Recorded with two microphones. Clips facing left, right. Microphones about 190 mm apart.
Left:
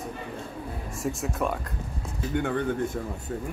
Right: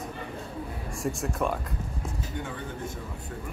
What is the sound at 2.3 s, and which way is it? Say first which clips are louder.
Speech: left 12 dB; 65° left (ahead or behind).